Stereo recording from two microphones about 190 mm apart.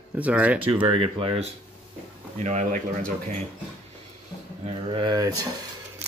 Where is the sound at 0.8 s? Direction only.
30° right (ahead or behind).